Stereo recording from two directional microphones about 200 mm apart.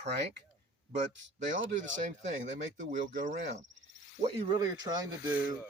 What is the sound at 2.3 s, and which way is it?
Speech, 40° right (ahead or behind).